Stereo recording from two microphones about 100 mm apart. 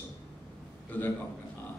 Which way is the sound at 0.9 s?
15° left (ahead or behind).